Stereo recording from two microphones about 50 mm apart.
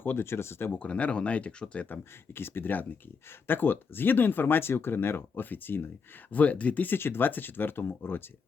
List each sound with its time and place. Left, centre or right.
0.0 s speech: left
0.8 s speech: left
1.9 s speech: left
6.3 s speech: left
6.9 s speech: left